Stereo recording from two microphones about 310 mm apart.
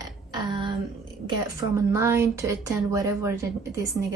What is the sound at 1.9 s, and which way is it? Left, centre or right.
Speech, centre.